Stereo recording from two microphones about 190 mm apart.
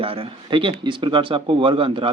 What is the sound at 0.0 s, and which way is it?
A man's voice, 30° right (ahead or behind).